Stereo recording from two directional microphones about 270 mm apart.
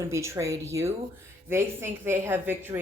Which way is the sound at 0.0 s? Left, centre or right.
Centre.